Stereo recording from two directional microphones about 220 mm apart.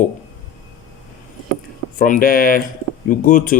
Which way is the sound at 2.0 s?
40° left (ahead or behind).